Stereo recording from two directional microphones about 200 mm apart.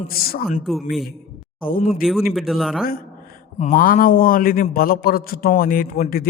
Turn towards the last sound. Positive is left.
turn(degrees=45)  # may be behind; listen again after turning